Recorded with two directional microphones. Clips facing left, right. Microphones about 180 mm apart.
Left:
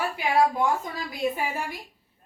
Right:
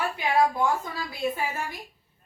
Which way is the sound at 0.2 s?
10° left (ahead or behind).